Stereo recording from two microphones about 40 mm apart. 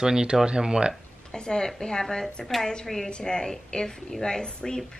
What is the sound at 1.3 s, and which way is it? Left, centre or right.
A woman's voice, centre.